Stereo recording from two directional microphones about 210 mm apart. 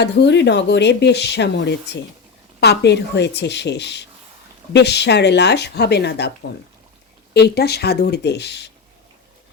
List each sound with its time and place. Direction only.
0.0 s speech: 55° left (ahead or behind)
7.3 s speech: 50° left (ahead or behind)